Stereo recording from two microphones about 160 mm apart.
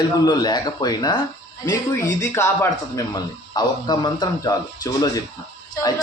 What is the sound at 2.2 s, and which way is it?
Speech, 15° left (ahead or behind).